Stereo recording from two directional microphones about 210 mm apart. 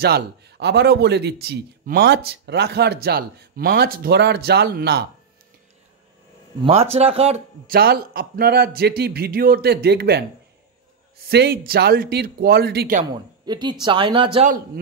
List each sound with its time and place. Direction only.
0.0 s a man's voice: 50° right (ahead or behind)
6.6 s speech: 30° right (ahead or behind)
7.6 s a man's voice: 45° right (ahead or behind)
11.2 s a man's voice: 50° right (ahead or behind)
13.5 s speech: 20° right (ahead or behind)